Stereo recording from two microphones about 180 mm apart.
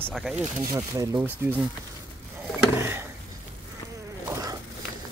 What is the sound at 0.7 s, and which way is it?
Speech, 15° right (ahead or behind).